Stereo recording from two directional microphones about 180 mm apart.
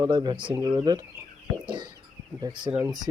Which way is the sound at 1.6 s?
25° right (ahead or behind).